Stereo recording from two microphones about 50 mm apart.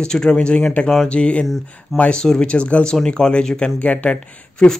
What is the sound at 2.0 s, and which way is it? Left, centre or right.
Speech, centre.